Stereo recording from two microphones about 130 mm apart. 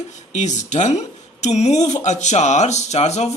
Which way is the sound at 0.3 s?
65° left (ahead or behind).